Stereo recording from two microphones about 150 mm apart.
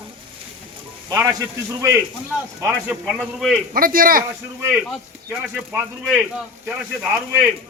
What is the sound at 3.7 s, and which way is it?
Speech, 70° right (ahead or behind).